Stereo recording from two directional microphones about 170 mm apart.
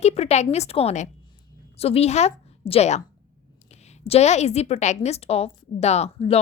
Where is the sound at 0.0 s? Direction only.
40° left (ahead or behind).